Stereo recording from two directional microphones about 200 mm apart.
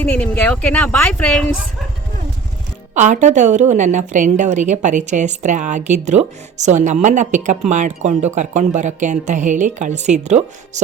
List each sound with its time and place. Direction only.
0.0 s speech: 10° left (ahead or behind)
2.9 s a woman's voice: 40° right (ahead or behind)